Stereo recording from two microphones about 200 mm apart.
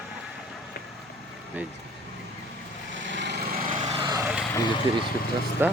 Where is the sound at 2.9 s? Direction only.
65° right (ahead or behind).